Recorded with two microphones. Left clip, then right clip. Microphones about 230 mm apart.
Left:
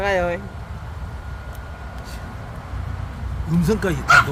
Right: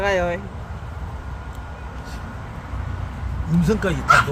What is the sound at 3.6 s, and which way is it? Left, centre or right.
Speech, centre.